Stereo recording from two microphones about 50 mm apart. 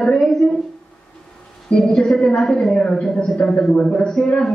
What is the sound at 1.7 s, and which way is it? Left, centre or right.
A woman's voice, centre.